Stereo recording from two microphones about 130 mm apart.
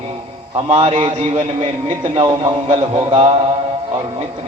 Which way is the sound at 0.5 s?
45° right (ahead or behind).